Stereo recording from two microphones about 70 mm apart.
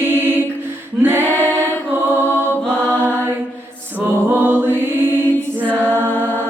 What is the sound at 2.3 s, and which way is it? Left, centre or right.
Mantra, left.